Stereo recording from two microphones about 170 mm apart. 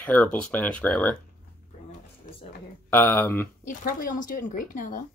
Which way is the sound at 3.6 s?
50° left (ahead or behind).